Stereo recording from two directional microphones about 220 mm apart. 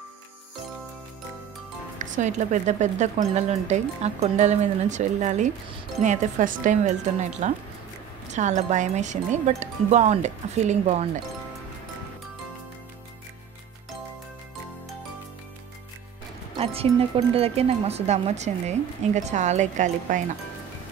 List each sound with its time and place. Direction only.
2.0 s speech: 35° right (ahead or behind)
17.3 s speech: 25° right (ahead or behind)